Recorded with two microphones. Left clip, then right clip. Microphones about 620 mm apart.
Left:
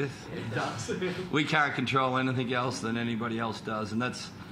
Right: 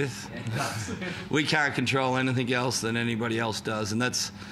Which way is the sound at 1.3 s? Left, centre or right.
Right.